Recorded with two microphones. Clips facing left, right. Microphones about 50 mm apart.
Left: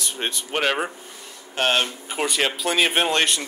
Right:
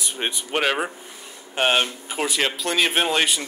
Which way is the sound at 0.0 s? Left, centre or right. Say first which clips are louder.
Right 1 dB; centre.